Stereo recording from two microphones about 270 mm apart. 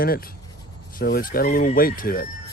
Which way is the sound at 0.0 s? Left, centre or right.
Left.